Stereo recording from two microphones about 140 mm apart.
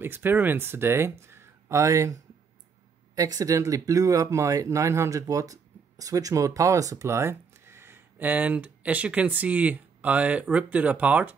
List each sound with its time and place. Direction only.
0.0 s speech: 15° right (ahead or behind)
3.2 s speech: 25° right (ahead or behind)